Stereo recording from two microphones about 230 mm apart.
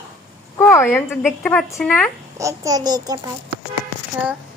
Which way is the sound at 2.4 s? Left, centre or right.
Centre.